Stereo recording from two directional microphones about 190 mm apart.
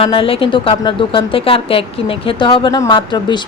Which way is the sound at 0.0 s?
30° left (ahead or behind).